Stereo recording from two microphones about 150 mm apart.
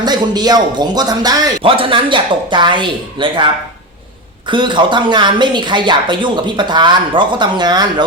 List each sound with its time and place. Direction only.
0.0 s a woman's voice: 25° right (ahead or behind)
4.4 s a woman's voice: 30° right (ahead or behind)